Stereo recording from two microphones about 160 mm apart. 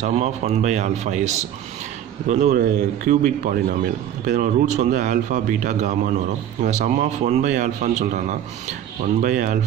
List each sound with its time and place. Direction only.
0.0 s speech: 45° right (ahead or behind)